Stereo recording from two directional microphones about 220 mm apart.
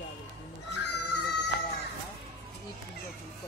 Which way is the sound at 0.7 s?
50° left (ahead or behind).